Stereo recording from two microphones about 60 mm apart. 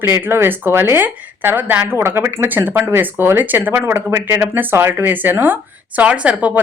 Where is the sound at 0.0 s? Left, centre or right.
Right.